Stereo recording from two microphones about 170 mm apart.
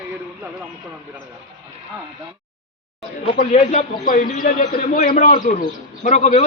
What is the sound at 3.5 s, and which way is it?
A man's voice, 40° left (ahead or behind).